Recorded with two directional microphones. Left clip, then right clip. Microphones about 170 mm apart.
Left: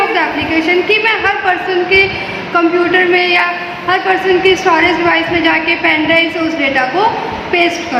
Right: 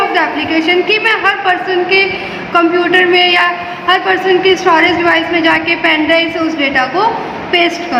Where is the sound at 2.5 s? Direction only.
15° right (ahead or behind).